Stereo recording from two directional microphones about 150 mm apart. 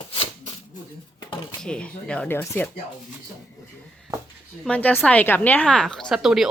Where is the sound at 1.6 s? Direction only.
5° left (ahead or behind).